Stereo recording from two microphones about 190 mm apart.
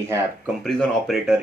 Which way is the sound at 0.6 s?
5° left (ahead or behind).